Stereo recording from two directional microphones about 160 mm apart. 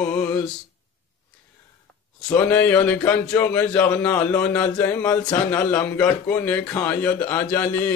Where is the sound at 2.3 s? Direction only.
10° left (ahead or behind).